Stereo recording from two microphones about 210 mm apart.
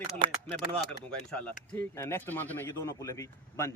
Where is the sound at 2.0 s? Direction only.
10° left (ahead or behind).